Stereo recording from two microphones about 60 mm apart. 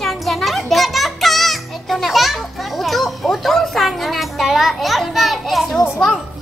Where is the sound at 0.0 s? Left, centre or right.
Centre.